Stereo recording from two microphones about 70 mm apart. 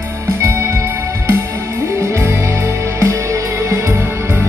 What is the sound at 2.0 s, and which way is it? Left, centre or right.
Music, right.